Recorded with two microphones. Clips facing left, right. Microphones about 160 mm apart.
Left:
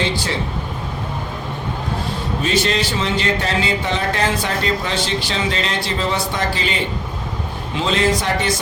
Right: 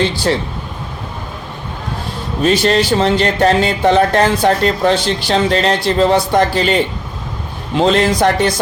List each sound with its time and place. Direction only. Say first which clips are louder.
2.4 s speech: right 7 dB; 50° right (ahead or behind)
7.8 s a man's voice: right 7 dB; 55° right (ahead or behind)